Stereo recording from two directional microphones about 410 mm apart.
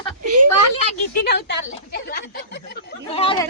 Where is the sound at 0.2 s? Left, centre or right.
Right.